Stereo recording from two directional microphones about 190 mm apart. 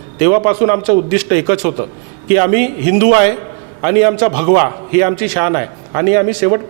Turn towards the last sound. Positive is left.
turn(degrees=-15)  # may be behind; listen again after turning